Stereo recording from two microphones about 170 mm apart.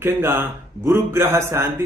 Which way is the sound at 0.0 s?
15° right (ahead or behind).